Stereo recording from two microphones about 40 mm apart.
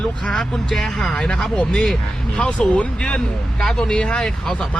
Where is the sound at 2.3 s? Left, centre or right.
Left.